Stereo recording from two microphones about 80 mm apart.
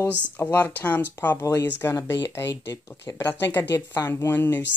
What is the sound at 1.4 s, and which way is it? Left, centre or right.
Speech, left.